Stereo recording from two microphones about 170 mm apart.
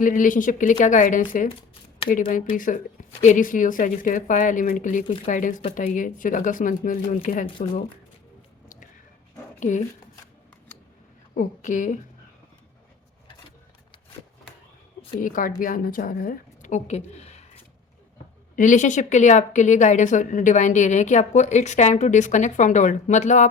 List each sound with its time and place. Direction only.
0.0 s a woman's voice: 50° left (ahead or behind)
2.6 s a woman's voice: 55° left (ahead or behind)
9.6 s speech: 45° left (ahead or behind)
11.3 s a woman's voice: 50° left (ahead or behind)
15.2 s a woman's voice: 55° left (ahead or behind)